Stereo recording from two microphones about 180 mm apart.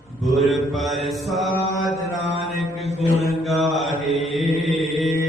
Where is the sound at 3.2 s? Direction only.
Centre (ahead or behind).